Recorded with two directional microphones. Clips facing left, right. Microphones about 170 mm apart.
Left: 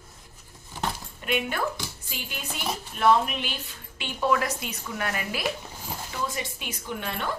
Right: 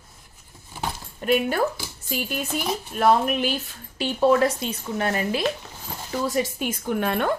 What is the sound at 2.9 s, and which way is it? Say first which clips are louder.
A woman's voice: right 2 dB; 45° right (ahead or behind).